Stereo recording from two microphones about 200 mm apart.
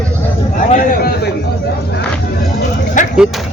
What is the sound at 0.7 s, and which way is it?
Speech, 50° left (ahead or behind).